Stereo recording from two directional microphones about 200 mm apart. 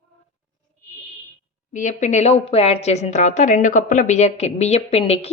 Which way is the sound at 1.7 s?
40° left (ahead or behind).